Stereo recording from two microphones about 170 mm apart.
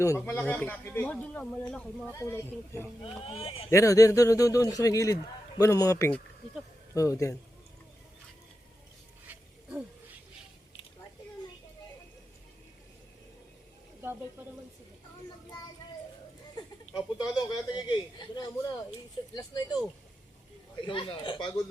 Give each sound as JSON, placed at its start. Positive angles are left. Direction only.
{"t": 0.0, "sound": "speech", "side_deg": 15}
{"t": 3.0, "sound": "speech", "side_deg": 35}
{"t": 3.7, "sound": "a man's voice", "side_deg": 20}
{"t": 9.3, "sound": "wild animals", "side_deg": -10}
{"t": 16.9, "sound": "a man's voice", "side_deg": 25}
{"t": 20.8, "sound": "a man's voice", "side_deg": 30}